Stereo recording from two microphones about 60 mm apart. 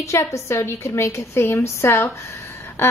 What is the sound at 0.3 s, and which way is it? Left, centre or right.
A woman's voice, left.